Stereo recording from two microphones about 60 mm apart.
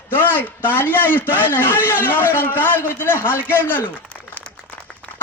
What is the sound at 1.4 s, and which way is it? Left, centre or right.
A man's voice, left.